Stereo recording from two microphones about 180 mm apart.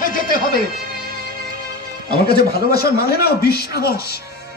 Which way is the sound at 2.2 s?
60° left (ahead or behind).